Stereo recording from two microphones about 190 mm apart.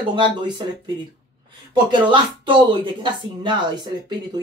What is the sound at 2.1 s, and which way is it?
Speech, 25° right (ahead or behind).